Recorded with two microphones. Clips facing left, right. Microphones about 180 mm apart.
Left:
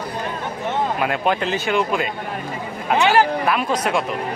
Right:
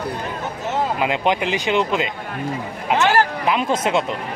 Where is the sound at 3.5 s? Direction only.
25° right (ahead or behind).